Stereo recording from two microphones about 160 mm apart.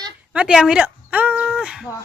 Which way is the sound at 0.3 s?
5° right (ahead or behind).